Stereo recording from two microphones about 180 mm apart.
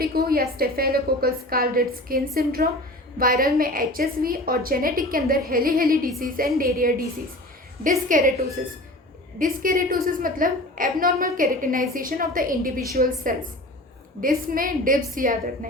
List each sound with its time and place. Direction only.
0.0 s a woman's voice: 55° right (ahead or behind)